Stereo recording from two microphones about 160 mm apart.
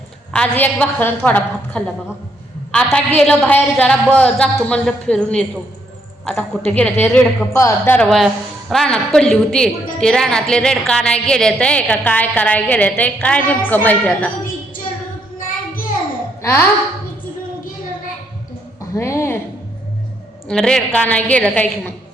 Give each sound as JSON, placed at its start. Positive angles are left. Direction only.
{"t": 0.3, "sound": "a woman's voice", "side_deg": 10}
{"t": 6.7, "sound": "a woman's voice", "side_deg": 10}
{"t": 7.5, "sound": "a woman's voice", "side_deg": 15}
{"t": 8.0, "sound": "a woman's voice", "side_deg": 0}
{"t": 15.4, "sound": "child singing", "side_deg": 60}
{"t": 16.4, "sound": "speech", "side_deg": 15}
{"t": 18.9, "sound": "a woman's voice", "side_deg": 20}
{"t": 20.5, "sound": "a woman's voice", "side_deg": 5}